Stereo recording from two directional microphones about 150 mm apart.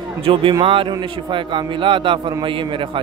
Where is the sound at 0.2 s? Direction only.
35° right (ahead or behind).